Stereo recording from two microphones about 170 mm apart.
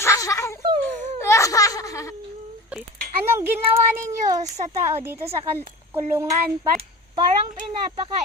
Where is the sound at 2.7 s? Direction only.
10° right (ahead or behind).